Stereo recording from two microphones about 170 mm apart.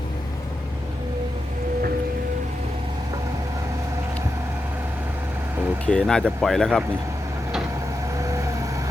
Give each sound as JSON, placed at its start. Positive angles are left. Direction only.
{"t": 5.8, "sound": "speech", "side_deg": 5}
{"t": 8.2, "sound": "vehicle", "side_deg": -20}